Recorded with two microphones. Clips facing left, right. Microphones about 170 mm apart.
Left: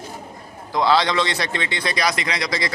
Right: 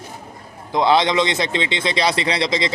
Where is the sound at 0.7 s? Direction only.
20° right (ahead or behind).